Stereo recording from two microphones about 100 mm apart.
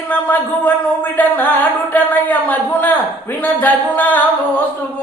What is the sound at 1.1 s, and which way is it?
Speech, 15° left (ahead or behind).